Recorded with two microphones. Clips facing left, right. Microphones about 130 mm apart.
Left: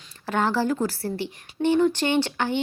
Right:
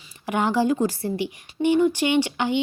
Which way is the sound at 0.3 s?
15° right (ahead or behind).